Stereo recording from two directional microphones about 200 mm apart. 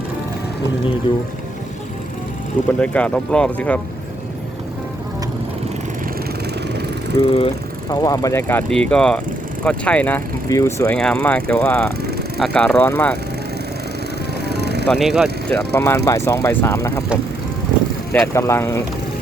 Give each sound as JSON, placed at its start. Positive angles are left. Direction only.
{"t": 1.1, "sound": "speech", "side_deg": 25}
{"t": 2.8, "sound": "speech", "side_deg": 5}
{"t": 7.2, "sound": "speech", "side_deg": 25}
{"t": 14.4, "sound": "music", "side_deg": -55}
{"t": 14.8, "sound": "speech", "side_deg": 0}
{"t": 15.4, "sound": "speech", "side_deg": 10}
{"t": 18.1, "sound": "speech", "side_deg": 15}